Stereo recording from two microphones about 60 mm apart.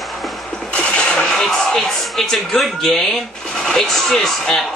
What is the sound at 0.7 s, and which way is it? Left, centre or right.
Music, centre.